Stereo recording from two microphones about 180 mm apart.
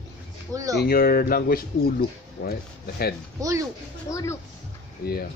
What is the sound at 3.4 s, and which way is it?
Speech, 15° right (ahead or behind).